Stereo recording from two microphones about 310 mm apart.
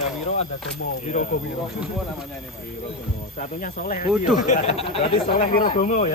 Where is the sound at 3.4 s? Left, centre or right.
Left.